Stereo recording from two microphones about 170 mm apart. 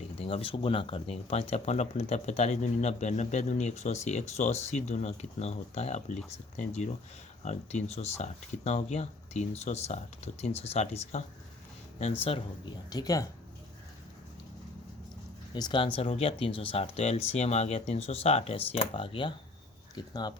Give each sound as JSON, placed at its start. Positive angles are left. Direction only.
{"t": 0.2, "sound": "speech", "side_deg": 35}
{"t": 12.9, "sound": "speech", "side_deg": 20}
{"t": 15.5, "sound": "speech", "side_deg": 25}